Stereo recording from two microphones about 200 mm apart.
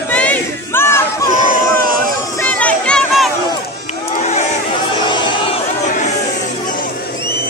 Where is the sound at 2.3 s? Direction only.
5° left (ahead or behind).